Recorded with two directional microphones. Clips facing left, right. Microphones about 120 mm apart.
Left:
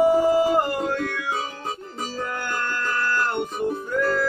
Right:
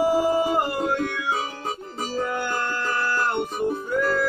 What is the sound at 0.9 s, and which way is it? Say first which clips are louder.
Music: right 1 dB; 10° right (ahead or behind).